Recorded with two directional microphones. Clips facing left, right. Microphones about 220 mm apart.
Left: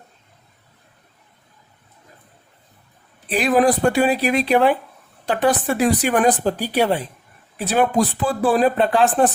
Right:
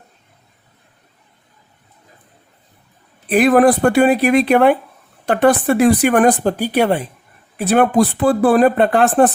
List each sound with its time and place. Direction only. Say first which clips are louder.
3.2 s speech: right 5 dB; 55° right (ahead or behind)